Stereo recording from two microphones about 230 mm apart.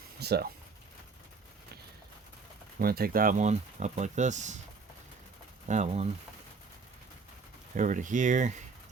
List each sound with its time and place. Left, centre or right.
0.2 s speech: right
2.7 s speech: right
5.6 s speech: right
7.8 s speech: right